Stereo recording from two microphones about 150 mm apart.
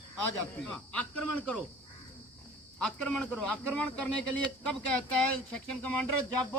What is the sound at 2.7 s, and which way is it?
Speech, 5° left (ahead or behind).